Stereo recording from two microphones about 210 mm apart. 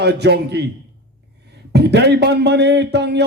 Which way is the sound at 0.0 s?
55° right (ahead or behind).